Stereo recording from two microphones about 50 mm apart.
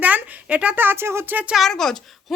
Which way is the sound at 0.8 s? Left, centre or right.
Right.